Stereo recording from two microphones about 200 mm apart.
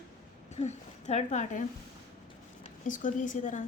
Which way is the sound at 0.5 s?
35° left (ahead or behind).